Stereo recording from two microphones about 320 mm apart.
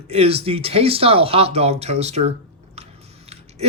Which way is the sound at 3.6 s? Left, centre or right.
Centre.